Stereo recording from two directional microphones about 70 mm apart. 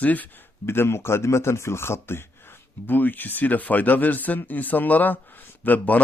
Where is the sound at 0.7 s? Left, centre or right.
Left.